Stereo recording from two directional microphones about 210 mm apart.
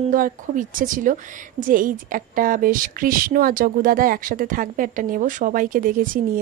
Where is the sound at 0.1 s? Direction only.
40° right (ahead or behind).